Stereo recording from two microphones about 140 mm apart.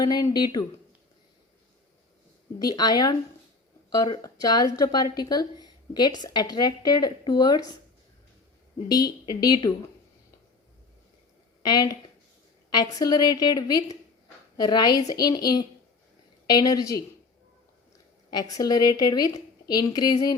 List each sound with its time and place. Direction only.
0.0 s a woman's voice: 30° left (ahead or behind)
2.6 s a woman's voice: 30° left (ahead or behind)
8.9 s a woman's voice: 30° left (ahead or behind)
11.6 s a woman's voice: 30° left (ahead or behind)
18.3 s a woman's voice: 25° left (ahead or behind)